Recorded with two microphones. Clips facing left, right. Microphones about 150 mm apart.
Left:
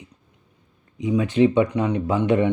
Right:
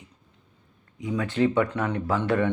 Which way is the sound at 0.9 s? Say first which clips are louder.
Left 6 dB; 20° left (ahead or behind).